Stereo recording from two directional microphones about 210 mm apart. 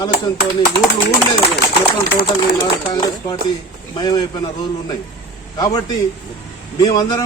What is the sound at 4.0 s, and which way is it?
Speech, 20° left (ahead or behind).